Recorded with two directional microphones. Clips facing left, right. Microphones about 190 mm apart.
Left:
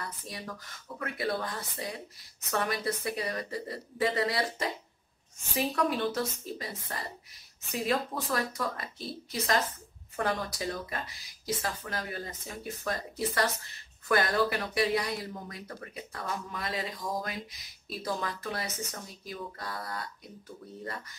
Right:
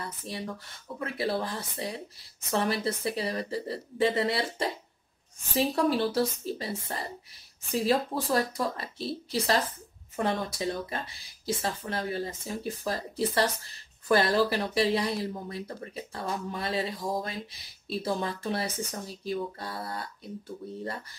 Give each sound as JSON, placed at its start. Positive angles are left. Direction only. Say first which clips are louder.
{"t": 0.0, "sound": "speech", "louder": "right 4 dB", "side_deg": -25}
{"t": 5.8, "sound": "speech", "louder": "right 4 dB", "side_deg": -30}